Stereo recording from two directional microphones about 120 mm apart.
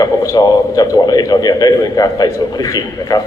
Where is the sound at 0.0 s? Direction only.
30° left (ahead or behind).